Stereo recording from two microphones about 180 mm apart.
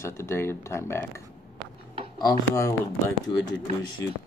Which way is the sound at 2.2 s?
20° left (ahead or behind).